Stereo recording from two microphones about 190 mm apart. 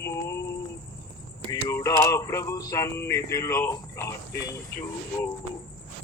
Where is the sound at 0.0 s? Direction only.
15° left (ahead or behind).